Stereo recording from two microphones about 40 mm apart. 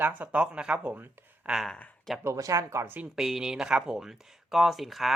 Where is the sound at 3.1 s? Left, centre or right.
Centre.